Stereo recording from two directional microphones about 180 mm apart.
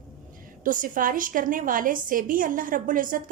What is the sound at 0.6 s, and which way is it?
A woman's voice, 50° right (ahead or behind).